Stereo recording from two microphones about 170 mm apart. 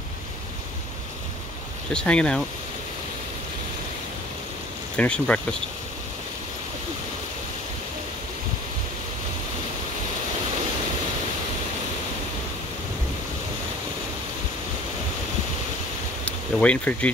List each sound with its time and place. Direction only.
1.9 s speech: 5° left (ahead or behind)
4.9 s speech: 5° left (ahead or behind)
16.3 s speech: 5° left (ahead or behind)